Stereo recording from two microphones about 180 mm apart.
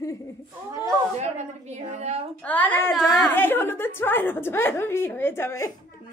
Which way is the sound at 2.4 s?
10° left (ahead or behind).